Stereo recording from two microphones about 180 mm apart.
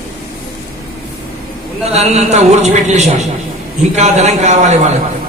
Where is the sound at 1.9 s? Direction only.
35° right (ahead or behind).